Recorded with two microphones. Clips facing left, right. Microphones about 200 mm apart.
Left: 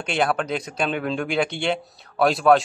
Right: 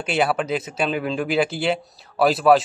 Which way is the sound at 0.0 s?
5° right (ahead or behind).